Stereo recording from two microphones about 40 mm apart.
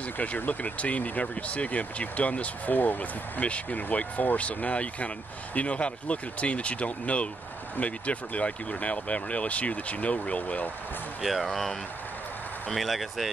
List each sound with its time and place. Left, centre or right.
0.2 s speech: left
2.7 s speech: left
3.4 s speech: left
11.2 s speech: centre
12.7 s speech: centre